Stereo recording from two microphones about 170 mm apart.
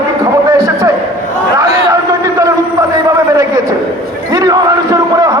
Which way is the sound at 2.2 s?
20° right (ahead or behind).